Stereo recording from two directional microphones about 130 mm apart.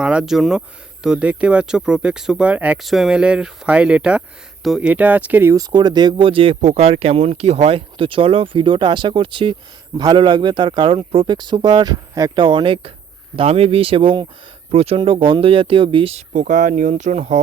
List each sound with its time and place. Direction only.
0.0 s speech: 5° right (ahead or behind)
5.5 s speech: 30° right (ahead or behind)
6.6 s speech: 55° right (ahead or behind); by 12.5 s 30° right (ahead or behind)
12.5 s speech: 40° right (ahead or behind)
16.1 s speech: 80° right; by 17.4 s 60° right (ahead or behind)